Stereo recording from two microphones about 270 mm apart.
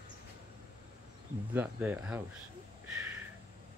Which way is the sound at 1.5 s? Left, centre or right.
Centre.